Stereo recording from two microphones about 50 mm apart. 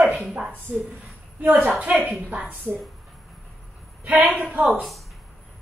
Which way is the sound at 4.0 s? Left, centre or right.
Right.